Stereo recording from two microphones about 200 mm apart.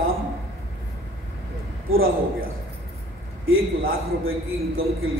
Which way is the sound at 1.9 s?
85° right.